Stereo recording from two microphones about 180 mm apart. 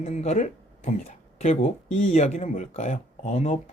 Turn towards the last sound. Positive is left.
turn(degrees=35)  # may be behind; listen again after turning